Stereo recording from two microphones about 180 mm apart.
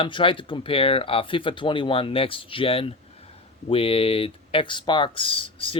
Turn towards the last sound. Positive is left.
turn(degrees=30)  # may be behind; listen again after turning